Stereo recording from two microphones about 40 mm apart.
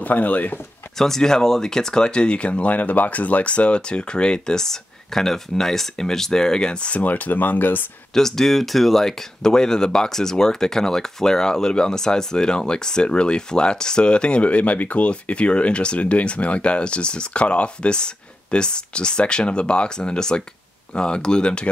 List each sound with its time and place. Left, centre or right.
0.0 s speech: left
0.9 s speech: centre; by 2.7 s left
2.7 s speech: left
7.0 s speech: left
8.1 s speech: centre; by 21.6 s left